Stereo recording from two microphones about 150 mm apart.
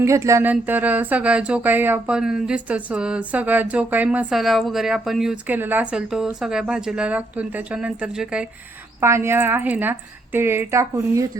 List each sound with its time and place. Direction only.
0.0 s speech: 20° right (ahead or behind)
9.0 s speech: 15° right (ahead or behind)